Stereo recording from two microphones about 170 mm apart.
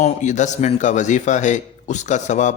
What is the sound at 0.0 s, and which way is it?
A man's voice, 45° left (ahead or behind).